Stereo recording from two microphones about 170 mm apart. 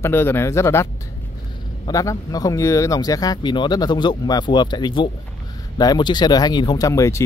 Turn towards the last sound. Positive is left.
turn(degrees=20)  # may be behind; listen again after turning